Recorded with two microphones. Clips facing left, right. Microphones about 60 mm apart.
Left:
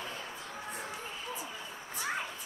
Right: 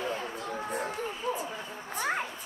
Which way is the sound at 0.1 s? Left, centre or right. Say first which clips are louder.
Right 8 dB; right.